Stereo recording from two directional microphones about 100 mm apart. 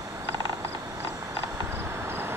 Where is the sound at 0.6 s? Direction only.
20° right (ahead or behind).